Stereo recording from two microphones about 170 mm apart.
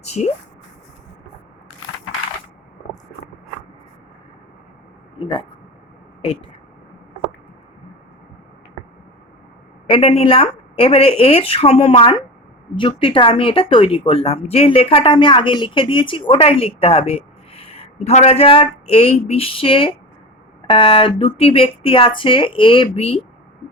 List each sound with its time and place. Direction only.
0.0 s speech: 40° left (ahead or behind)
5.2 s speech: 30° left (ahead or behind)
9.8 s speech: 35° left (ahead or behind)